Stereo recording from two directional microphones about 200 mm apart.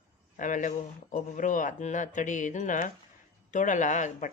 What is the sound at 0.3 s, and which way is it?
Speech, 40° left (ahead or behind).